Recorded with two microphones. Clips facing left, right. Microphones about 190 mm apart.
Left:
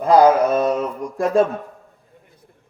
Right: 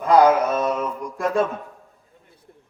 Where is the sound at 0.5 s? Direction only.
30° left (ahead or behind).